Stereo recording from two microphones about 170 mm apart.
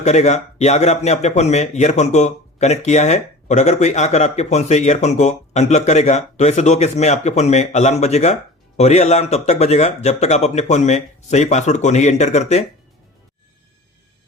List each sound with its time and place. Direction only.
0.0 s speech: 40° left (ahead or behind)